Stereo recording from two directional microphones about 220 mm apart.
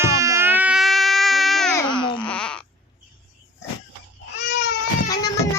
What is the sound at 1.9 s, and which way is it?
Baby cry, 20° left (ahead or behind).